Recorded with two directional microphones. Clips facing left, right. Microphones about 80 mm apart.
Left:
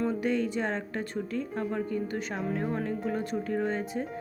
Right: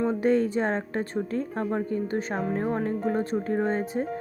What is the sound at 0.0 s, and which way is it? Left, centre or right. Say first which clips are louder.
Speech: right 5 dB; right.